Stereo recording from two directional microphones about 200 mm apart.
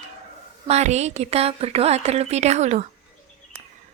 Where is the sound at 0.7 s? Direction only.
35° right (ahead or behind).